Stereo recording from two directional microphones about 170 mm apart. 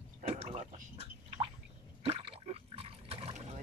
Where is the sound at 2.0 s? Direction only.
35° right (ahead or behind).